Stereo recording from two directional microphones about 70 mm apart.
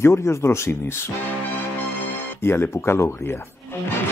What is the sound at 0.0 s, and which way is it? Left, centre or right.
Speech, left.